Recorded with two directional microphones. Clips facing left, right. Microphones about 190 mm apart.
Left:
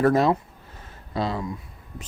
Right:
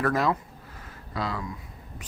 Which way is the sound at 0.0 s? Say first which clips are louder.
Left 6 dB; 25° left (ahead or behind).